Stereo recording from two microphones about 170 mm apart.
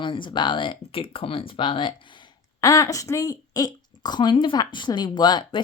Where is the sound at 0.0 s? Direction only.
30° left (ahead or behind).